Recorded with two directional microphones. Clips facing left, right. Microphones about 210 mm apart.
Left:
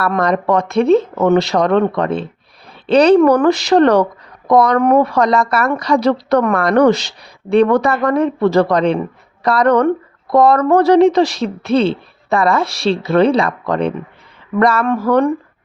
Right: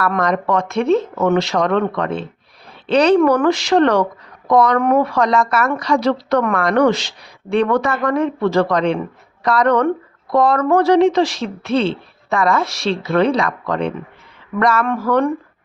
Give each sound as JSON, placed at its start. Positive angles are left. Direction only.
{"t": 0.0, "sound": "speech", "side_deg": 35}